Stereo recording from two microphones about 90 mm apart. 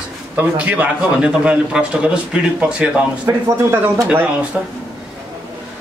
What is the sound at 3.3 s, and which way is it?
Speech, 35° right (ahead or behind).